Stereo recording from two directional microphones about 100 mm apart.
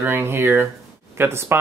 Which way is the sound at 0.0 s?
20° right (ahead or behind).